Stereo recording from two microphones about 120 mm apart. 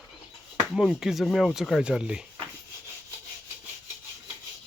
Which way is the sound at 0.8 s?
5° right (ahead or behind).